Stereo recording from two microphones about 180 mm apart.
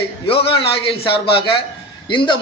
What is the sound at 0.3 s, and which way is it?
A man's voice, 30° left (ahead or behind).